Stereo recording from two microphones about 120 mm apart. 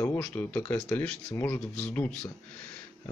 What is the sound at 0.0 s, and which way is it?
Speech, 15° left (ahead or behind).